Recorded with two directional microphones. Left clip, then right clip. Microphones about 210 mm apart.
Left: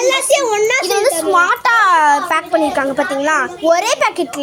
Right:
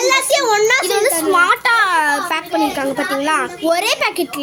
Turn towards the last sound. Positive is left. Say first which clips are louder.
# left 2 dB
turn(degrees=0)  # may be behind; listen again after turning